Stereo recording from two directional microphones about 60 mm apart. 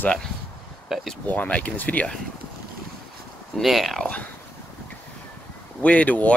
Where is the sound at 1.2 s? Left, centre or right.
Left.